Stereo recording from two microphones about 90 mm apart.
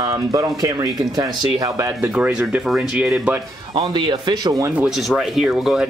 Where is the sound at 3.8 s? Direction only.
65° right (ahead or behind); by 4.7 s 45° right (ahead or behind).